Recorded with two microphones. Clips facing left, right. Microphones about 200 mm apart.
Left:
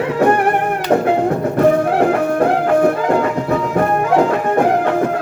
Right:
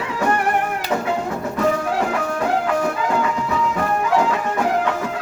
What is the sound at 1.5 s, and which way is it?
Music, 55° left (ahead or behind).